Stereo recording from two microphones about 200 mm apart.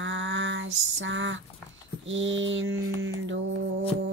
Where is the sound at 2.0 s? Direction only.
70° right (ahead or behind).